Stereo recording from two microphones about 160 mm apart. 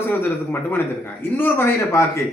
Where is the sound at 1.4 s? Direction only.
15° left (ahead or behind).